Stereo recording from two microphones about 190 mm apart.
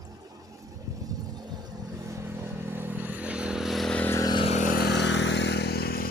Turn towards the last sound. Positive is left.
turn(degrees=55)  # may be behind; listen again after turning